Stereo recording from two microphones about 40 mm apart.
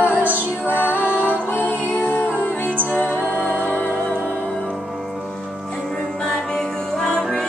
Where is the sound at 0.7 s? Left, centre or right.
Left.